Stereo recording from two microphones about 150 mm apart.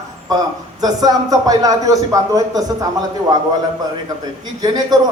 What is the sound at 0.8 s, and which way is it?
A man's voice, 25° right (ahead or behind).